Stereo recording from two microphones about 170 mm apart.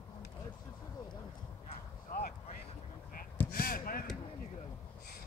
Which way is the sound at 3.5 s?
65° left (ahead or behind).